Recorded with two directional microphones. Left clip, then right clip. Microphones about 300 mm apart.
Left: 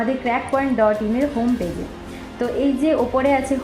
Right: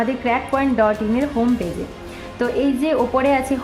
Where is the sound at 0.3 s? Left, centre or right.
Right.